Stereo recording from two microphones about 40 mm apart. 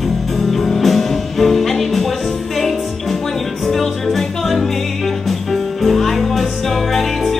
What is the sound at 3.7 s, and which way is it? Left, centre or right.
Music, centre.